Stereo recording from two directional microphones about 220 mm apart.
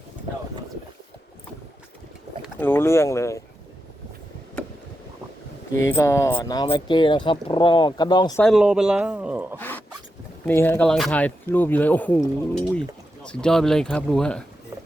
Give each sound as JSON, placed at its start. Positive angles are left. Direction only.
{"t": 2.6, "sound": "speech", "side_deg": 10}
{"t": 5.8, "sound": "speech", "side_deg": 15}
{"t": 8.4, "sound": "speech", "side_deg": -5}
{"t": 9.6, "sound": "dog", "side_deg": 10}
{"t": 10.4, "sound": "speech", "side_deg": 10}